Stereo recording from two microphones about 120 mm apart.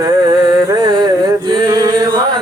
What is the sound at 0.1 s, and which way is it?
Music, 40° right (ahead or behind).